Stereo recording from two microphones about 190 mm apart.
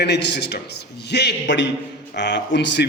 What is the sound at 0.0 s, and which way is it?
A man's voice, 65° left (ahead or behind).